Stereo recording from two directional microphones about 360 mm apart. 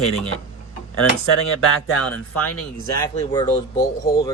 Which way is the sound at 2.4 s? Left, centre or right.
Centre.